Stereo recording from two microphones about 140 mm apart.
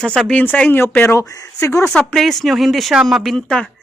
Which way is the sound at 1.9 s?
5° left (ahead or behind).